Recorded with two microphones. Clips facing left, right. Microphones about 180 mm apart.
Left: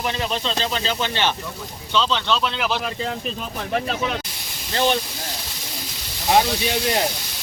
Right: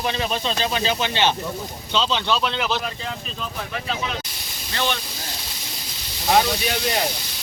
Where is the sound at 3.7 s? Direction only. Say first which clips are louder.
Left 6 dB; 50° left (ahead or behind).